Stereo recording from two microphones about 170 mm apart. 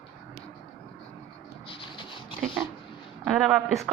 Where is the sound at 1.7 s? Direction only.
30° left (ahead or behind).